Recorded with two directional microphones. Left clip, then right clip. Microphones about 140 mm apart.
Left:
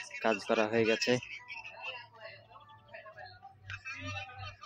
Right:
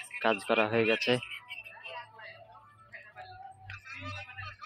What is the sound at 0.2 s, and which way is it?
Speech, 5° left (ahead or behind).